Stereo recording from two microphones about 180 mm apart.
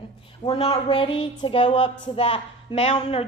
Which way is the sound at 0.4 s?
30° left (ahead or behind).